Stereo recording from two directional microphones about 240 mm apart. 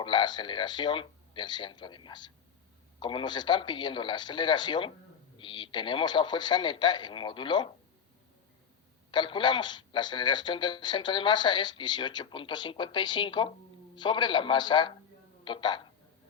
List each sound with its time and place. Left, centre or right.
0.0 s speech: centre
9.1 s a woman's voice: centre